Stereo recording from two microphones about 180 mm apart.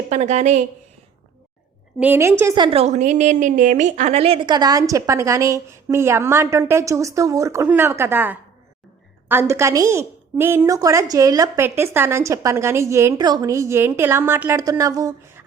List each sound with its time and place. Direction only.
0.1 s a woman's voice: 40° right (ahead or behind)
2.0 s a woman's voice: 10° right (ahead or behind)
2.6 s a woman's voice: 30° right (ahead or behind)